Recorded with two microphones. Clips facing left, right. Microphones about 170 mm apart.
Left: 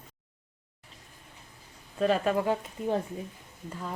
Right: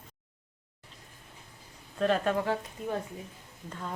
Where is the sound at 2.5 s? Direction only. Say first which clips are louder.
Left 3 dB; 25° left (ahead or behind).